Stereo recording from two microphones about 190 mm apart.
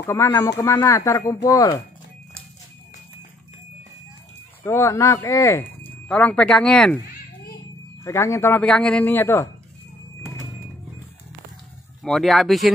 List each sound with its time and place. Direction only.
0.0 s speech: 15° left (ahead or behind)
4.6 s speech: 15° left (ahead or behind)
8.0 s speech: 15° left (ahead or behind)
12.0 s speech: centre (ahead or behind)